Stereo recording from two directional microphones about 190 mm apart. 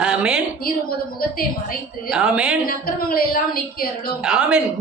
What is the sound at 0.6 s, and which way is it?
Speech, 50° left (ahead or behind).